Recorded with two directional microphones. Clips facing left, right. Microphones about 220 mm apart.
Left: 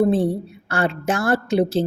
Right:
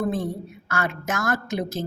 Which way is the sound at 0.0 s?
30° left (ahead or behind).